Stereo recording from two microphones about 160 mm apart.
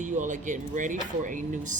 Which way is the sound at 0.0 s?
50° right (ahead or behind).